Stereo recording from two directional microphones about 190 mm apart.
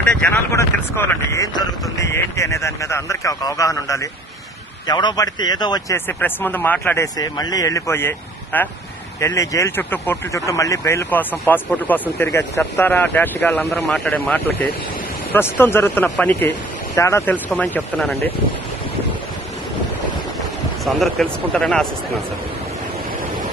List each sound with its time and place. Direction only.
0.0 s speech: 5° left (ahead or behind)
20.8 s speech: centre (ahead or behind)